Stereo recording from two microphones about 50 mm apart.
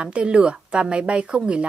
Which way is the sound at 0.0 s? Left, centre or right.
Right.